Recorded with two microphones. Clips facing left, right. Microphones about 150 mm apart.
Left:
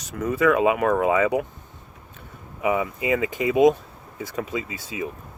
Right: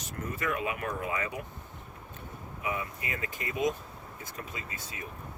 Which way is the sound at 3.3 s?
90° left.